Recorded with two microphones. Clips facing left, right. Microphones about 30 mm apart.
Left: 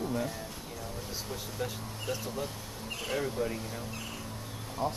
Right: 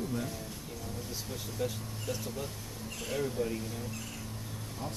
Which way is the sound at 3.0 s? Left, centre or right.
Left.